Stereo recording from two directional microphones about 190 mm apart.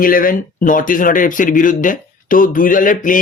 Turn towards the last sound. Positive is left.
turn(degrees=45)  # may be behind; listen again after turning